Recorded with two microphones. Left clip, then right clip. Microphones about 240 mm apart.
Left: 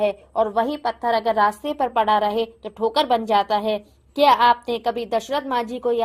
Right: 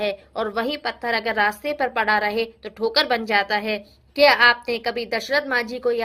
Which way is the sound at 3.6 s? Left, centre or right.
Left.